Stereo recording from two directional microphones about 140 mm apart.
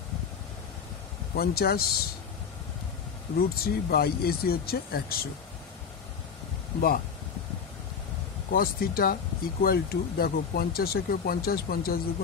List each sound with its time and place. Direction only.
1.3 s speech: 90° left
3.3 s speech: 90° left
8.5 s speech: 90° left